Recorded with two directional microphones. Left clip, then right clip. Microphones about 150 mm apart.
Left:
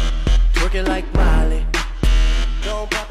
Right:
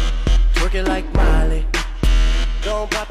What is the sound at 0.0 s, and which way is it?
Music, centre (ahead or behind).